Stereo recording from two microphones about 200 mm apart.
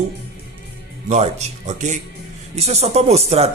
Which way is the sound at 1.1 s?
35° right (ahead or behind).